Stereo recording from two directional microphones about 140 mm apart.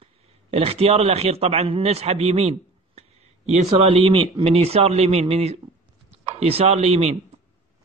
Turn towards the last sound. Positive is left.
turn(degrees=-50)  # may be behind; listen again after turning